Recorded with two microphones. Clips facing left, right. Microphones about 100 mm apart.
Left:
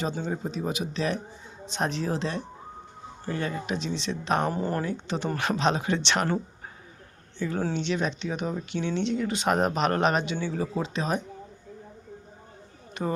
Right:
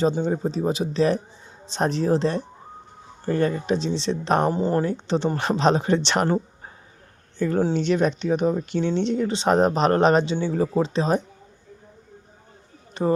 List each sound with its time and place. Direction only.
0.0 s speech: 30° right (ahead or behind)
7.3 s speech: 45° right (ahead or behind)
12.9 s a sound: 30° right (ahead or behind)